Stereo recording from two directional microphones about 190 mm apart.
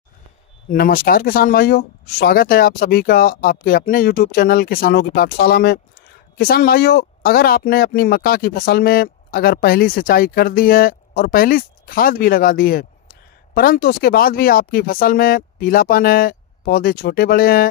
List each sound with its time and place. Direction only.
0.7 s speech: 50° left (ahead or behind)